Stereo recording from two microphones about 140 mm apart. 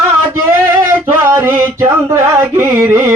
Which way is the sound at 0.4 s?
15° right (ahead or behind).